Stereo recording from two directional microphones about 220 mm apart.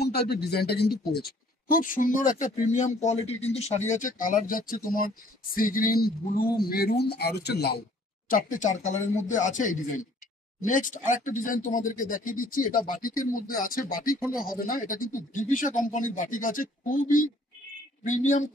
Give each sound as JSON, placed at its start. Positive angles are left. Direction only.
{"t": 0.0, "sound": "a man's voice", "side_deg": 45}
{"t": 14.2, "sound": "speech", "side_deg": -5}
{"t": 14.5, "sound": "a man's voice", "side_deg": 40}